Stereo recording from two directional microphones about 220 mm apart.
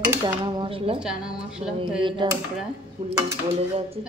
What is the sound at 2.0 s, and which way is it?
Dishes, 20° right (ahead or behind).